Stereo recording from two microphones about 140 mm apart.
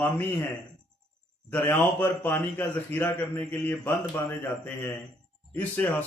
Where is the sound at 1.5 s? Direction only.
15° left (ahead or behind).